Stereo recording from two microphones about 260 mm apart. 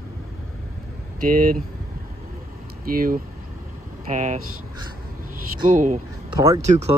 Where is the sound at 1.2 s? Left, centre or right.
Right.